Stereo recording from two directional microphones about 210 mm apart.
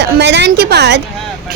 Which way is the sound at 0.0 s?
55° right (ahead or behind).